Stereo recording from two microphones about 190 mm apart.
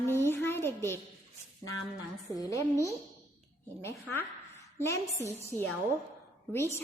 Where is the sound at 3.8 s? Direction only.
10° left (ahead or behind).